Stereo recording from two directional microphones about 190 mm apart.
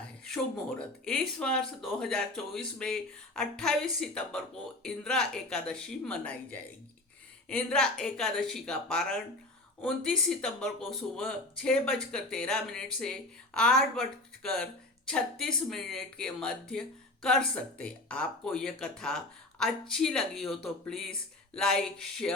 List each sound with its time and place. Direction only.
0.3 s speech: 5° left (ahead or behind)